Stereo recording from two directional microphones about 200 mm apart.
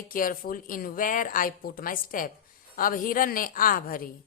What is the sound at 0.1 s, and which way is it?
A woman's voice, 45° left (ahead or behind).